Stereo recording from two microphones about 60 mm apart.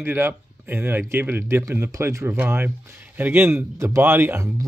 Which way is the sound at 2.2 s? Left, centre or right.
Right.